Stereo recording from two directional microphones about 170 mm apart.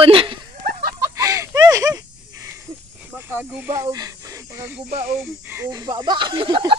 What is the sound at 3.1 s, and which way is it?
Speech, 10° right (ahead or behind).